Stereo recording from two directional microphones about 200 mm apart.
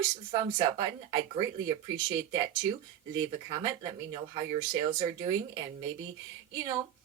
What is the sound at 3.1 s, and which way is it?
Speech, 20° right (ahead or behind).